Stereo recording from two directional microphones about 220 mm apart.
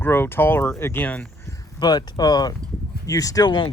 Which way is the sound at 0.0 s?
10° left (ahead or behind).